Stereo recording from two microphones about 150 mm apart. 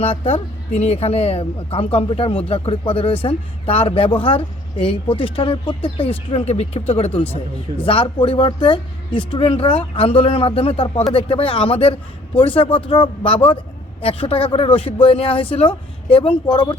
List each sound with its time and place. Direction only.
0.0 s speech: 40° left (ahead or behind)